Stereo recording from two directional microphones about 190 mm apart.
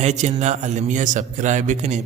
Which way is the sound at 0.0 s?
40° right (ahead or behind).